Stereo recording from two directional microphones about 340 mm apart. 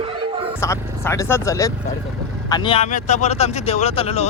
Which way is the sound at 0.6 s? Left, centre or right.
Centre.